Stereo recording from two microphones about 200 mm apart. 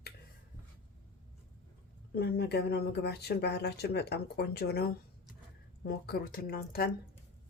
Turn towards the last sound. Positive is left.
turn(degrees=50)  # may be behind; listen again after turning